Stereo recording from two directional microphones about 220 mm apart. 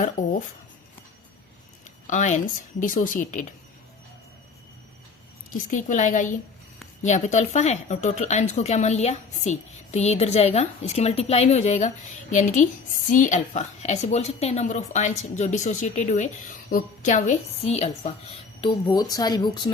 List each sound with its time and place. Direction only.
0.0 s speech: 40° left (ahead or behind)
2.0 s a woman's voice: 35° left (ahead or behind)
5.5 s a woman's voice: 35° left (ahead or behind); by 19.7 s 20° left (ahead or behind)